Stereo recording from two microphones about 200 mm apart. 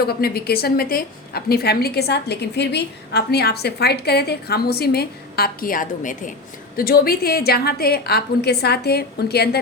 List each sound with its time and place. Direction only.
0.0 s a woman's voice: 50° left (ahead or behind)